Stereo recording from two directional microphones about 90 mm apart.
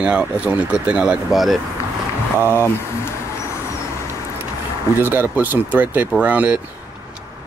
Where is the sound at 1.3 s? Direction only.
Centre (ahead or behind).